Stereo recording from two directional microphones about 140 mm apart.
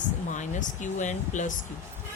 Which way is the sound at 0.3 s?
65° left (ahead or behind).